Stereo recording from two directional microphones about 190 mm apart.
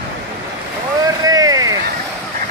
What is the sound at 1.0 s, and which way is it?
Vehicle, 20° right (ahead or behind).